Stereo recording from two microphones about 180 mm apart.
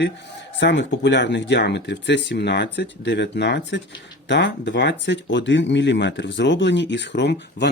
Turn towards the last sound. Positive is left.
turn(degrees=75)  # may be behind; listen again after turning